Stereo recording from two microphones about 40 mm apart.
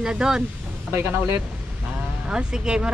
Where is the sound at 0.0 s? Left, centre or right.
Centre.